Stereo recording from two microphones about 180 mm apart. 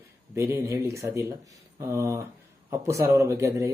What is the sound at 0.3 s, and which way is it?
Speech, 15° right (ahead or behind).